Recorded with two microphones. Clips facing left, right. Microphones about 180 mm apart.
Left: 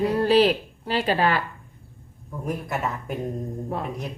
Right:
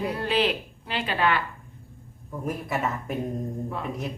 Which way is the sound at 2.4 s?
Centre (ahead or behind).